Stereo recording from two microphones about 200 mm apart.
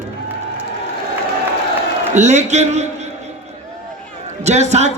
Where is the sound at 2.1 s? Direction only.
35° right (ahead or behind).